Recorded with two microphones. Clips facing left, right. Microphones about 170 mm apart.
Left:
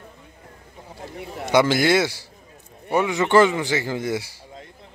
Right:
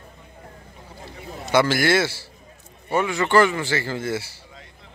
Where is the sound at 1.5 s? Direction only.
20° left (ahead or behind).